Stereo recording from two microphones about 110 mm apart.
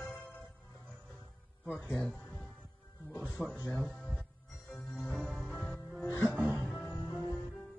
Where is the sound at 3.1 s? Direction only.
15° right (ahead or behind).